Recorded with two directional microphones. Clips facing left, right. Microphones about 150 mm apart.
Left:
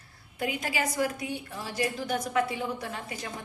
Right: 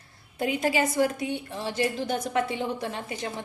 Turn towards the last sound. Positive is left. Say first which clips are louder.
# right 4 dB
turn(degrees=-25)  # may be behind; listen again after turning